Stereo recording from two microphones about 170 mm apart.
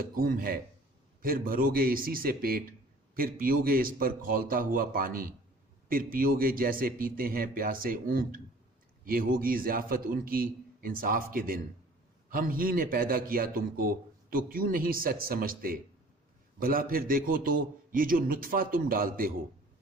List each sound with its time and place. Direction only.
0.0 s a man's voice: 60° right (ahead or behind)